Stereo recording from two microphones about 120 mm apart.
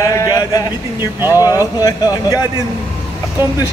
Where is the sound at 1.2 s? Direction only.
20° right (ahead or behind).